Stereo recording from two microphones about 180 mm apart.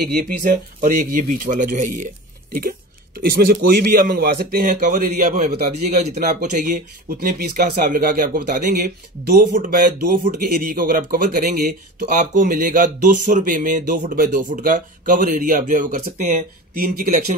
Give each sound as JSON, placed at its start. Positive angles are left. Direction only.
{"t": 0.0, "sound": "speech", "side_deg": -50}
{"t": 3.2, "sound": "a man's voice", "side_deg": -55}